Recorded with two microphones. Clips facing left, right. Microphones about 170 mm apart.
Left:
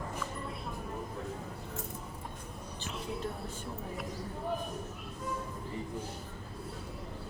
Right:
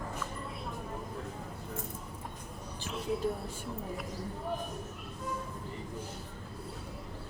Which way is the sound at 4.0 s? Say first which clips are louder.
Even; centre (ahead or behind).